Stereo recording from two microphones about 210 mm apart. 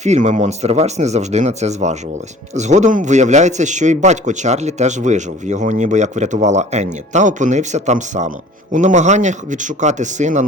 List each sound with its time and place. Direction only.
0.0 s a man's voice: 35° right (ahead or behind)